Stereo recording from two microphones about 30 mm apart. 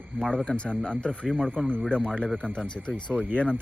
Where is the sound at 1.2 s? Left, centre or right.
Left.